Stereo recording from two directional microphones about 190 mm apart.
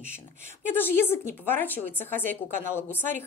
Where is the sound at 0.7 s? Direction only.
10° left (ahead or behind).